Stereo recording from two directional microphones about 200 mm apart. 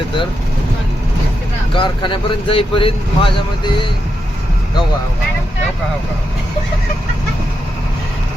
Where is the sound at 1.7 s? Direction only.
25° left (ahead or behind).